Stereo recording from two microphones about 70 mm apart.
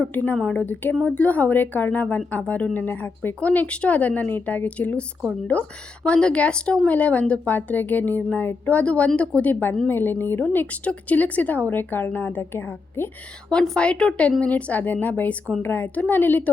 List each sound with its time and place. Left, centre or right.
0.1 s speech: left
13.5 s a woman's voice: centre